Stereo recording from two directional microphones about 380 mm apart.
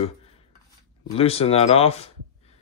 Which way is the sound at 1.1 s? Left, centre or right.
Centre.